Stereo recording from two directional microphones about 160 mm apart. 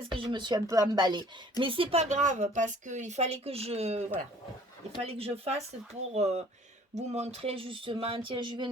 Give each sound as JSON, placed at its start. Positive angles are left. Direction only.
{"t": 0.2, "sound": "speech", "side_deg": -30}
{"t": 5.0, "sound": "speech", "side_deg": -40}